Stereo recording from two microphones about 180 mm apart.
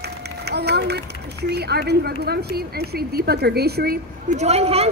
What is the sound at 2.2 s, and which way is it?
Speech, 65° right (ahead or behind).